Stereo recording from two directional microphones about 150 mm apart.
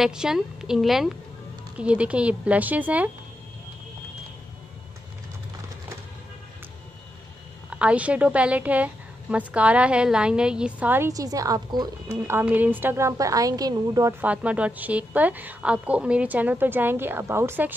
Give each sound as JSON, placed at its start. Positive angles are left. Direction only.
{"t": 0.0, "sound": "a woman's voice", "side_deg": -5}
{"t": 7.8, "sound": "a woman's voice", "side_deg": -10}
{"t": 12.2, "sound": "a woman's voice", "side_deg": -15}
{"t": 14.2, "sound": "a woman's voice", "side_deg": -10}